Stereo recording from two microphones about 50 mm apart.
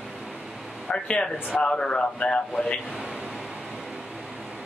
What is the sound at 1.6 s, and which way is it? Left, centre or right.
Speech, centre.